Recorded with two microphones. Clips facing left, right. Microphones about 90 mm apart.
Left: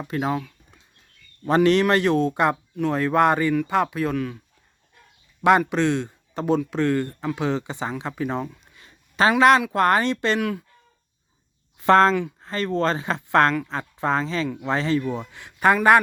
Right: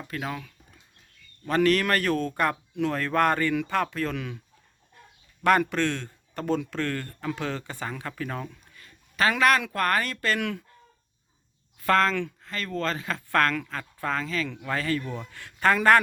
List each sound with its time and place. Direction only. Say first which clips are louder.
0.1 s speech: left 9 dB; 25° left (ahead or behind)
1.5 s speech: left 5 dB; 30° left (ahead or behind)
5.4 s speech: left 4 dB; 15° left (ahead or behind)
8.7 s a sound: left 5 dB; 25° left (ahead or behind)
9.4 s speech: left 7 dB; 25° left (ahead or behind)
11.8 s speech: left 6 dB; 30° left (ahead or behind)